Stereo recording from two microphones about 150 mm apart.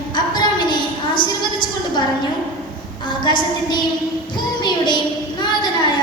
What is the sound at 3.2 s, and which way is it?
Speech, 30° left (ahead or behind).